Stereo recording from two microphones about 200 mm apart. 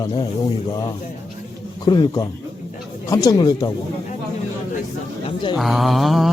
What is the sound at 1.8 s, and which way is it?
Speech, 20° left (ahead or behind).